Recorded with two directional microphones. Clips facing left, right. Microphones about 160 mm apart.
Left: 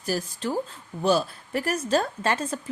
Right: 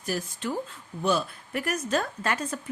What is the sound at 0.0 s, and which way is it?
A woman's voice, 35° left (ahead or behind).